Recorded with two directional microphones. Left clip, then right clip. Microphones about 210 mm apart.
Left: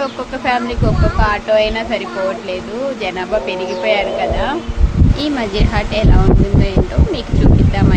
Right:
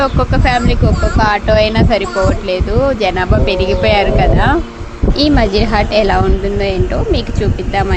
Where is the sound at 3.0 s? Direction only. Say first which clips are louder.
Right 4 dB; 25° right (ahead or behind).